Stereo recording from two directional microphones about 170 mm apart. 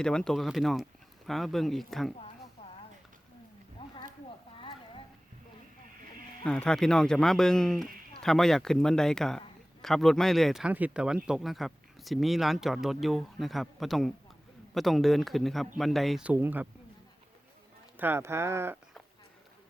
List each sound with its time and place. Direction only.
0.0 s speech: 5° left (ahead or behind)
3.8 s a sound: 30° left (ahead or behind)
6.4 s speech: 5° left (ahead or behind); by 16.6 s 10° right (ahead or behind)
17.9 s speech: 10° right (ahead or behind)